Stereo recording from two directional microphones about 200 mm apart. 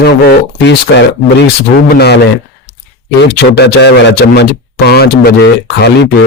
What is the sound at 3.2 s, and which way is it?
Speech, 55° left (ahead or behind).